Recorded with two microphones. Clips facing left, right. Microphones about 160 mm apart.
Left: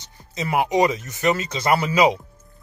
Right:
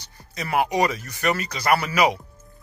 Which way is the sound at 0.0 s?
20° left (ahead or behind).